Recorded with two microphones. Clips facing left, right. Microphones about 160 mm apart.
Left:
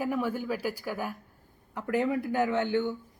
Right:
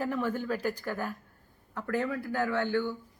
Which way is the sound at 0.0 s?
10° left (ahead or behind).